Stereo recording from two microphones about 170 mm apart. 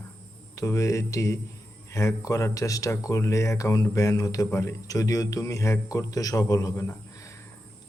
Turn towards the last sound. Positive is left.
turn(degrees=20)  # may be behind; listen again after turning